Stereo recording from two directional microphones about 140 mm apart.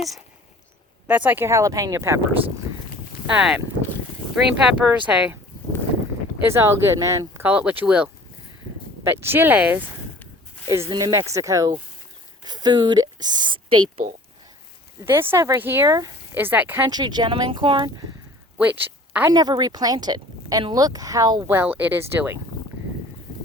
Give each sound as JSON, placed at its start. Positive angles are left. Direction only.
{"t": 1.0, "sound": "speech", "side_deg": -10}
{"t": 3.3, "sound": "speech", "side_deg": -5}
{"t": 4.6, "sound": "speech", "side_deg": -5}
{"t": 6.5, "sound": "speech", "side_deg": -20}
{"t": 9.1, "sound": "speech", "side_deg": -15}
{"t": 10.7, "sound": "speech", "side_deg": -20}
{"t": 15.0, "sound": "speech", "side_deg": -15}
{"t": 16.3, "sound": "speech", "side_deg": -15}
{"t": 16.9, "sound": "speech", "side_deg": -30}
{"t": 18.5, "sound": "a sound", "side_deg": -10}
{"t": 19.3, "sound": "speech", "side_deg": -30}
{"t": 21.4, "sound": "speech", "side_deg": -15}